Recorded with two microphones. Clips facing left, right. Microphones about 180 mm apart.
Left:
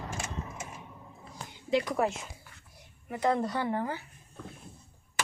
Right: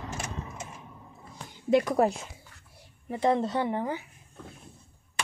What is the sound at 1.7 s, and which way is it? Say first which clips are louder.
Speech: right 5 dB; 50° right (ahead or behind).